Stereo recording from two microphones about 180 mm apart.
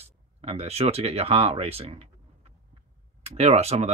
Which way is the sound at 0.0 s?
35° right (ahead or behind).